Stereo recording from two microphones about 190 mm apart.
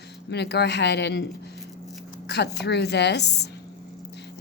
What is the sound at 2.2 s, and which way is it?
Speech, 60° left (ahead or behind).